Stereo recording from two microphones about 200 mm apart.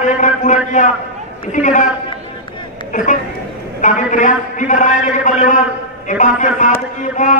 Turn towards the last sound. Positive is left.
turn(degrees=40)  # may be behind; listen again after turning